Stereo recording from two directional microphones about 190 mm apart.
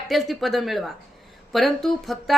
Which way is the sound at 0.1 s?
Centre (ahead or behind).